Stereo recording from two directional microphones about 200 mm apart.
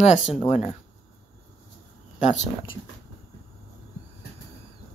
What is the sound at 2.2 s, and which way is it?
Speech, 35° left (ahead or behind).